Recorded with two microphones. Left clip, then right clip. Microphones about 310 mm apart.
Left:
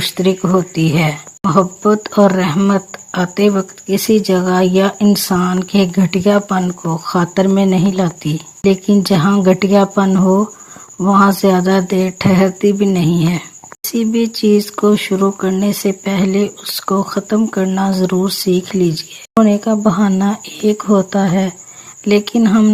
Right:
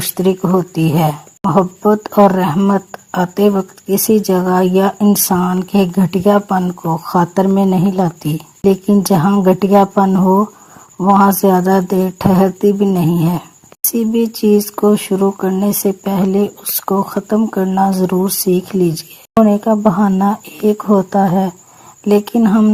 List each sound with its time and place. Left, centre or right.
0.0 s speech: right